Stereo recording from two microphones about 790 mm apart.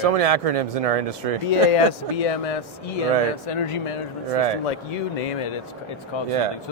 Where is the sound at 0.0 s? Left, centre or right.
Right.